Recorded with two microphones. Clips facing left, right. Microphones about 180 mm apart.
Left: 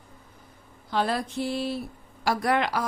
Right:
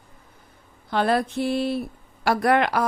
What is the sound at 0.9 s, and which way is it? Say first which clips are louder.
A woman's voice: right 5 dB; 60° right (ahead or behind).